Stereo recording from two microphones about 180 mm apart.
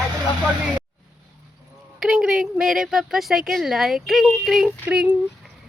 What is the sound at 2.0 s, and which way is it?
A woman's voice, 5° right (ahead or behind).